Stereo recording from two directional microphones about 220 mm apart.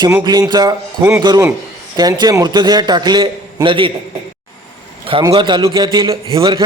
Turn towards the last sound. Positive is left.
turn(degrees=-20)  # may be behind; listen again after turning